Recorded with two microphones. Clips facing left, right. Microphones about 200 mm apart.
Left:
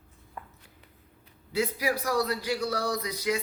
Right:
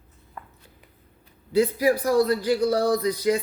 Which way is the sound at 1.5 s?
30° right (ahead or behind).